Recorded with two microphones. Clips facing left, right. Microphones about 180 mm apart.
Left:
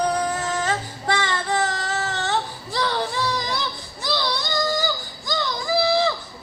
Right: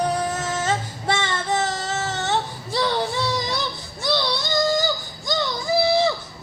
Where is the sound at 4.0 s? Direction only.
20° right (ahead or behind).